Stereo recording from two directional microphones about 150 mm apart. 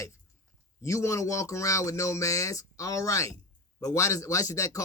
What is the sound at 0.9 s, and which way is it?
Speech, 20° left (ahead or behind).